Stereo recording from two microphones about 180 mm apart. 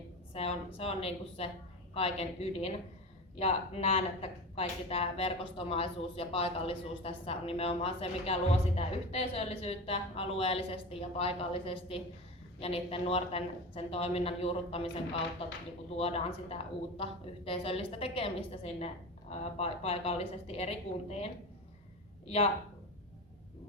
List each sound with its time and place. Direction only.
0.3 s speech: 35° left (ahead or behind)